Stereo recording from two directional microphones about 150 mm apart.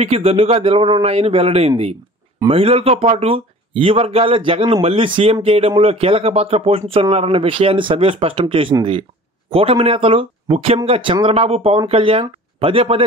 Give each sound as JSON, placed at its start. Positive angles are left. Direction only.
{"t": 0.0, "sound": "speech", "side_deg": -40}